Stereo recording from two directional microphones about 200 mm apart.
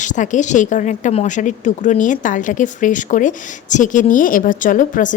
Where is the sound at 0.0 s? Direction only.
40° left (ahead or behind).